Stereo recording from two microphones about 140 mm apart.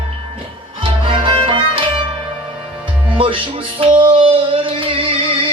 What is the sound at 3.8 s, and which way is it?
Music, 40° right (ahead or behind).